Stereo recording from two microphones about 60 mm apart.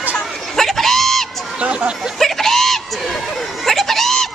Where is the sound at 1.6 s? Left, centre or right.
Centre.